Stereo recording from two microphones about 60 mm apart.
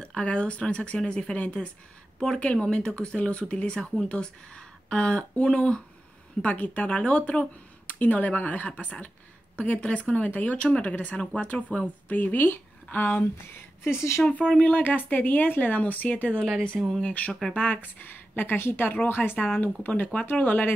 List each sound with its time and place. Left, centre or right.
0.0 s speech: centre
7.8 s a woman's voice: left
13.8 s speech: left
14.2 s speech: left
17.3 s speech: centre
17.6 s a woman's voice: left